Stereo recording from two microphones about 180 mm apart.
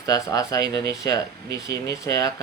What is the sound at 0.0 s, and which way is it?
Speech, 20° left (ahead or behind).